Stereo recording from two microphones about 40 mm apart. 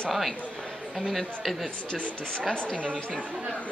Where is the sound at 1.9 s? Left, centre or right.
Left.